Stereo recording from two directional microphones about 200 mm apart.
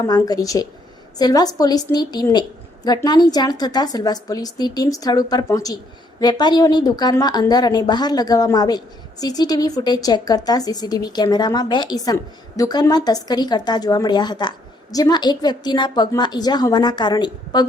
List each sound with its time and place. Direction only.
0.0 s a woman's voice: 20° left (ahead or behind)